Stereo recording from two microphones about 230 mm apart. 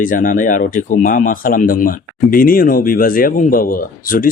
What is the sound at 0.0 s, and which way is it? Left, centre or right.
Speech, left.